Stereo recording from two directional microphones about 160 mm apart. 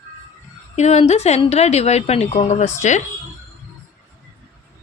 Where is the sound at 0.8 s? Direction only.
40° left (ahead or behind).